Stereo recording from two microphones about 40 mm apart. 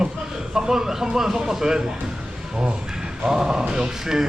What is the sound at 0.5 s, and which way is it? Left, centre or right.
A man's voice, centre.